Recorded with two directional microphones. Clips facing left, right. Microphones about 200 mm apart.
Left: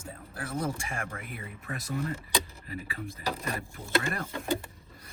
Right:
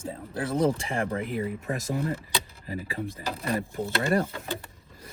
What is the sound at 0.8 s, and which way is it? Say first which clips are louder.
Speech: right 9 dB; 25° right (ahead or behind).